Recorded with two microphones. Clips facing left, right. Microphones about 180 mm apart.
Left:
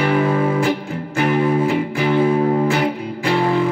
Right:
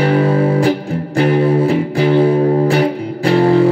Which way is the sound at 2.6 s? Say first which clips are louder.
Right 4 dB; 35° right (ahead or behind).